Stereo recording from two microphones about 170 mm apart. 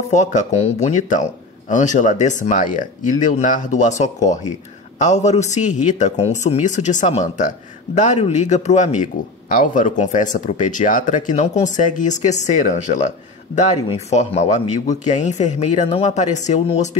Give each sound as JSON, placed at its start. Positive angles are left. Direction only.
{"t": 0.1, "sound": "a man's voice", "side_deg": 45}